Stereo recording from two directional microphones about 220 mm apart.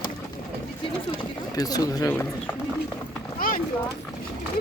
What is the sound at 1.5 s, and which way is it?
Speech, 15° left (ahead or behind).